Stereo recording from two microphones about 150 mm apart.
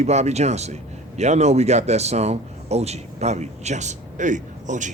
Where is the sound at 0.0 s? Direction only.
50° right (ahead or behind).